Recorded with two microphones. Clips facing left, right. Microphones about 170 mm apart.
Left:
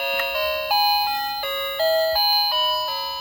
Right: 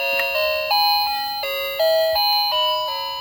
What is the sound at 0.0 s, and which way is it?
Doorbell, 5° right (ahead or behind).